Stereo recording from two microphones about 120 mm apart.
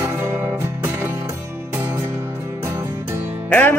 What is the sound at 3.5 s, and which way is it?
Music, 15° left (ahead or behind).